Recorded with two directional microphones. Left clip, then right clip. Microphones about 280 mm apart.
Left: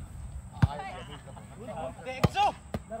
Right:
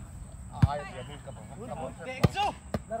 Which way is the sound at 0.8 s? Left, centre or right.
Left.